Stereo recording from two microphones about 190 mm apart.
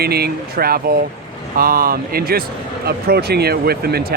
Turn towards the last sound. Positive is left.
turn(degrees=-55)  # may be behind; listen again after turning